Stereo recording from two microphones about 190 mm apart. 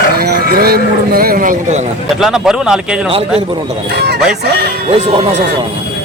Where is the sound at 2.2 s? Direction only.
Centre (ahead or behind).